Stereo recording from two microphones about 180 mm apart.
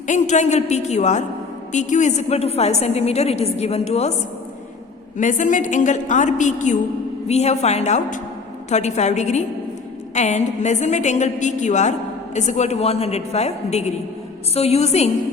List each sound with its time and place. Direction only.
0.1 s a woman's voice: 40° left (ahead or behind)
5.1 s a woman's voice: 45° left (ahead or behind)